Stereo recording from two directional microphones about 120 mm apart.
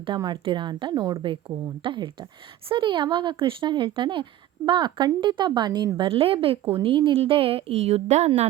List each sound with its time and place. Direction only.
0.2 s a woman's voice: 40° right (ahead or behind); by 8.3 s 70° right (ahead or behind)